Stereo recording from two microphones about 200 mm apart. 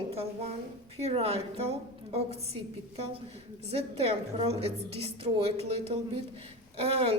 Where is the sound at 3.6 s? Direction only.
30° right (ahead or behind).